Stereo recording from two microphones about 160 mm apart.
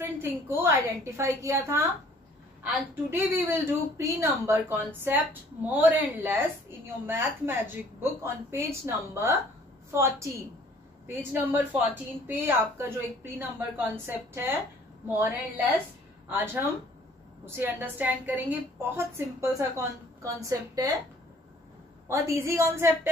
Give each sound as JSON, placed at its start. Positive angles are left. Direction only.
{"t": 0.0, "sound": "a woman's voice", "side_deg": -15}
{"t": 22.0, "sound": "a woman's voice", "side_deg": -20}